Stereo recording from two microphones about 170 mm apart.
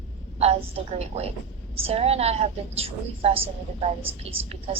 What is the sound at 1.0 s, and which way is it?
A woman's voice, 35° right (ahead or behind).